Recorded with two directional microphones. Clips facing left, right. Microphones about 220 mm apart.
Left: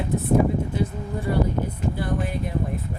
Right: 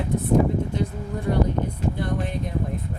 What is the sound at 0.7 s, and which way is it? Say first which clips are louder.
Speech: left 1 dB; 5° left (ahead or behind).